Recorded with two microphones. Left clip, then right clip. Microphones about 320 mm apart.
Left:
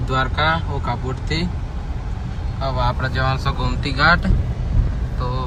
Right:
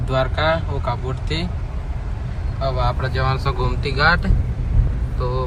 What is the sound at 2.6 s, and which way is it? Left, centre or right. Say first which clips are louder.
Speech: even; centre.